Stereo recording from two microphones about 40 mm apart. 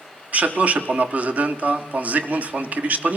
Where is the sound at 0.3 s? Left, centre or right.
Right.